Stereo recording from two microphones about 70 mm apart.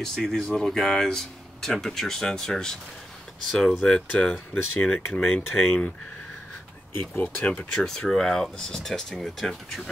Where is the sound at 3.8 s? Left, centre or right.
Centre.